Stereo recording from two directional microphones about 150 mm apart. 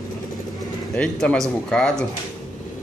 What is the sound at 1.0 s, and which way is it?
Speech, 5° left (ahead or behind).